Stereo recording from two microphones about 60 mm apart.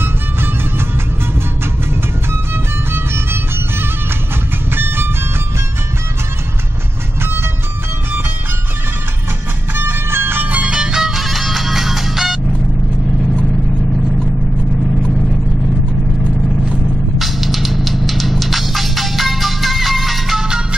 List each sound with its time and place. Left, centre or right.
0.0 s music: right
2.5 s music: right
9.8 s music: right
10.5 s music: centre
17.2 s music: centre